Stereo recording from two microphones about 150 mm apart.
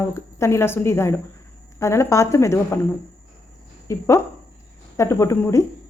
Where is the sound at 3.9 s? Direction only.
20° left (ahead or behind).